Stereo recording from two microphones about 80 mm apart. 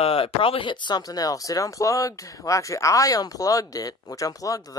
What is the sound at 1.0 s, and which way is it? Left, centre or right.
Speech, left.